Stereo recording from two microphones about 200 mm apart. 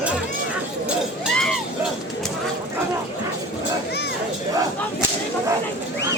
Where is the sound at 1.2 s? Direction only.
Centre (ahead or behind).